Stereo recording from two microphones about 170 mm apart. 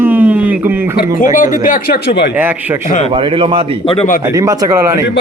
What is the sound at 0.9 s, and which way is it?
Speech, 50° left (ahead or behind).